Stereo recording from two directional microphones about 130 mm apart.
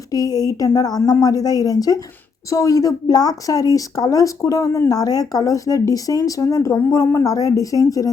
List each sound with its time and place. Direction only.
0.1 s a woman's voice: 30° left (ahead or behind)